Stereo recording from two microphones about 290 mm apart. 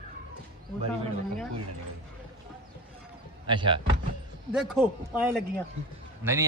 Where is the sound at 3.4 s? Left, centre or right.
Centre.